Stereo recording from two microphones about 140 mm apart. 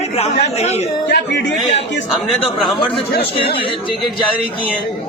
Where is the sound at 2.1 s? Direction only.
Centre (ahead or behind).